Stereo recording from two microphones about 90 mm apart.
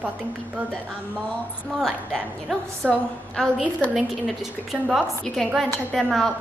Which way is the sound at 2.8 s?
Centre (ahead or behind).